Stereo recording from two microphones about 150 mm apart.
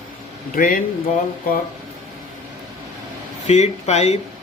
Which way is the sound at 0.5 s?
70° left (ahead or behind).